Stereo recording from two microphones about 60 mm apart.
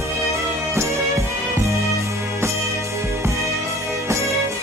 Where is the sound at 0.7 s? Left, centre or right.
Right.